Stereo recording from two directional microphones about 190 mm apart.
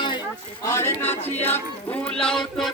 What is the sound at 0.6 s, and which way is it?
Music, 15° left (ahead or behind).